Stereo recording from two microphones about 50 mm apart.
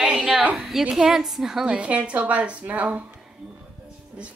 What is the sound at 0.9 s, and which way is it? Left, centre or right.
Speech, centre.